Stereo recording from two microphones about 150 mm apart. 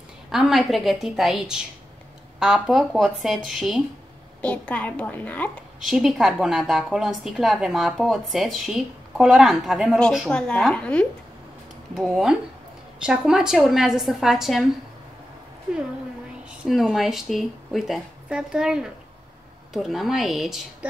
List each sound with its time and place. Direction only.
0.3 s a woman's voice: centre (ahead or behind)
4.4 s a woman's voice: 10° left (ahead or behind)
5.9 s a woman's voice: centre (ahead or behind)
16.4 s a woman's voice: centre (ahead or behind)